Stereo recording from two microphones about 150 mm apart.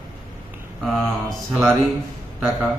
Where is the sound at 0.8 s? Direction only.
Centre (ahead or behind).